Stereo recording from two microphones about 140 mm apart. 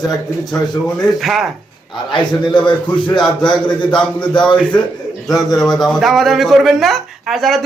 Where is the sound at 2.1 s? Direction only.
35° left (ahead or behind).